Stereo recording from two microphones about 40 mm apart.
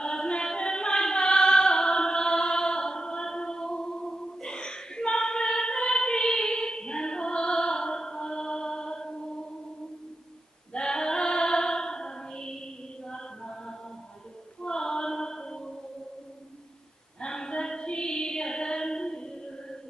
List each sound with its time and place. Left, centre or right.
0.0 s a sound: left
4.4 s choir: left
10.7 s female singing: centre
17.2 s female singing: centre